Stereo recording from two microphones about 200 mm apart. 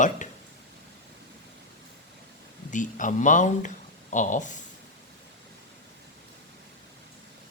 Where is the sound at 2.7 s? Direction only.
40° left (ahead or behind).